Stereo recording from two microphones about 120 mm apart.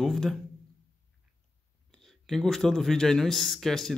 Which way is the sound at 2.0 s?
Centre (ahead or behind).